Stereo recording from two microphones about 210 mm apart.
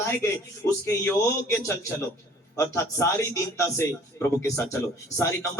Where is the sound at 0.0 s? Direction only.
15° left (ahead or behind).